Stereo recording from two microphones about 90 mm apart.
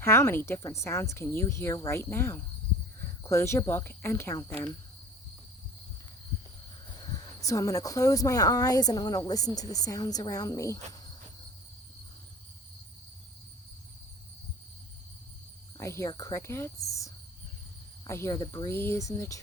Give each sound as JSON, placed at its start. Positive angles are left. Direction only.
{"t": 0.0, "sound": "a woman's voice", "side_deg": 30}
{"t": 7.0, "sound": "speech", "side_deg": 35}
{"t": 15.8, "sound": "speech", "side_deg": 30}
{"t": 16.0, "sound": "speech", "side_deg": 45}
{"t": 16.3, "sound": "speech", "side_deg": 30}
{"t": 18.0, "sound": "cricket", "side_deg": 35}
{"t": 18.3, "sound": "speech", "side_deg": 45}
{"t": 18.7, "sound": "a woman's voice", "side_deg": 25}